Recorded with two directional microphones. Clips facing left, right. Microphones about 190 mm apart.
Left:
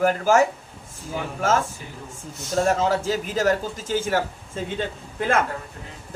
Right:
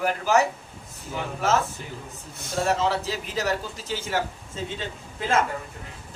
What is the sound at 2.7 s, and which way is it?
A man's voice, 45° left (ahead or behind).